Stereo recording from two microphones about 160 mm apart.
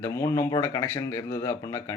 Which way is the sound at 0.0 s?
20° left (ahead or behind).